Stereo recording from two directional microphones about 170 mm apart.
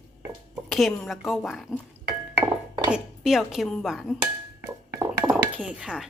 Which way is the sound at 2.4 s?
20° right (ahead or behind).